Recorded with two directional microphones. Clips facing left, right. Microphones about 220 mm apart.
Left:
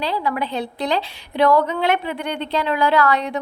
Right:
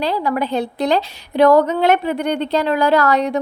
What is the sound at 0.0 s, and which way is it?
A woman's voice, 45° right (ahead or behind).